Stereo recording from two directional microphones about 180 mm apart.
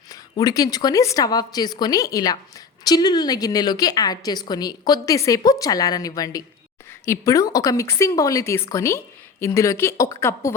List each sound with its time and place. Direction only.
0.1 s a woman's voice: 20° left (ahead or behind)